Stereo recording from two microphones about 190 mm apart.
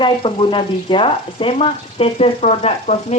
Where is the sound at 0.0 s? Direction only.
25° left (ahead or behind).